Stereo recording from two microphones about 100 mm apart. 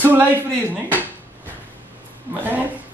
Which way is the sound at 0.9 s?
20° right (ahead or behind).